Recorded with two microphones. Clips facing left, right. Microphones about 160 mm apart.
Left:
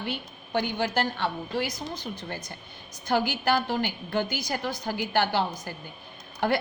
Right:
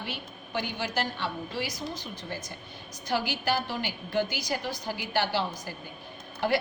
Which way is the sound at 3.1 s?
55° left (ahead or behind).